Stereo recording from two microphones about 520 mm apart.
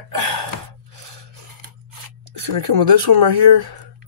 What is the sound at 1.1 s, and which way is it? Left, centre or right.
Scissors, right.